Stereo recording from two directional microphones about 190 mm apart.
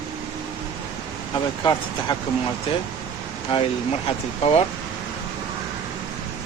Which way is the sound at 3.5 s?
30° left (ahead or behind).